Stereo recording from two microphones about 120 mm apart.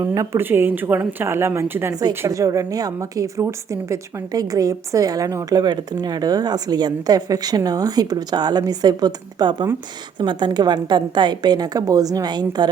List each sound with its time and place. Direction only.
0.0 s a woman's voice: 30° right (ahead or behind)
0.3 s a woman's voice: 20° right (ahead or behind)
1.9 s a woman's voice: 30° right (ahead or behind)